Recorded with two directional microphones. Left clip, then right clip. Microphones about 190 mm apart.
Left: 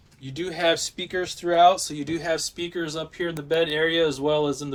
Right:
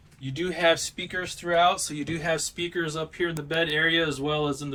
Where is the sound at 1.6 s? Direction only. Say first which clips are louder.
Left 5 dB; 5° right (ahead or behind).